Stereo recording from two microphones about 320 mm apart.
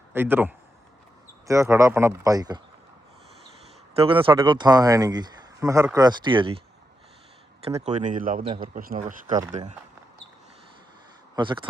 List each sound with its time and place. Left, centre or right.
0.1 s a man's voice: centre
3.9 s speech: centre
7.6 s speech: centre
11.3 s speech: centre